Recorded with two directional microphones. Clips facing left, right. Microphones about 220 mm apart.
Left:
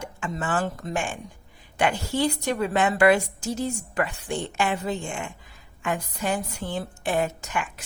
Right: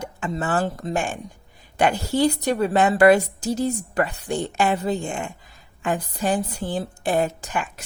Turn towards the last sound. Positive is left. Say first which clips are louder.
# right 2 dB
turn(degrees=-35)  # may be behind; listen again after turning